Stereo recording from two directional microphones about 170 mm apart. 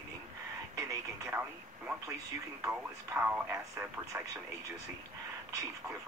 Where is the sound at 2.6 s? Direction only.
15° right (ahead or behind).